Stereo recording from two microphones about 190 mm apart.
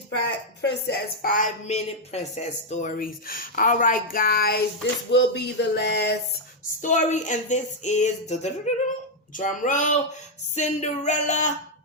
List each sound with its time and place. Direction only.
0.3 s speech: 60° left (ahead or behind)
5.1 s a sound: 65° left (ahead or behind)
6.8 s speech: 40° left (ahead or behind)